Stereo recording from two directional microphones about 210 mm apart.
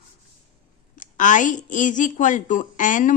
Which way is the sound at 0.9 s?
40° left (ahead or behind).